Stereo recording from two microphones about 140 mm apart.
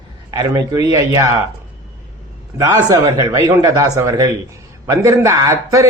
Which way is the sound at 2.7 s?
20° right (ahead or behind).